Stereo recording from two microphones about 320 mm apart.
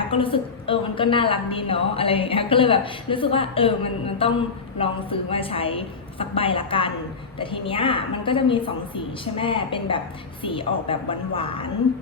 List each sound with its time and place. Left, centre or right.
0.1 s a woman's voice: centre